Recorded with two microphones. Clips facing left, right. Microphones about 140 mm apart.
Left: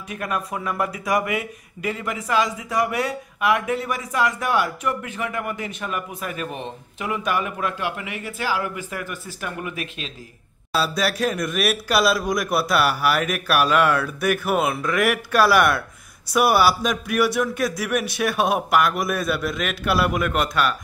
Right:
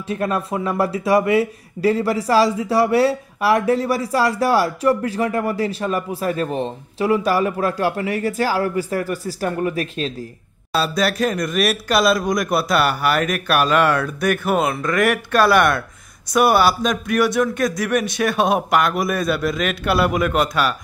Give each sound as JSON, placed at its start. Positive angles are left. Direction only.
{"t": 0.1, "sound": "speech", "side_deg": -30}
{"t": 10.7, "sound": "a man's voice", "side_deg": 5}